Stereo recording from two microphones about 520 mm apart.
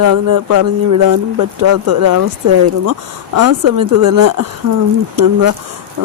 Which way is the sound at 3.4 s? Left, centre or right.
Right.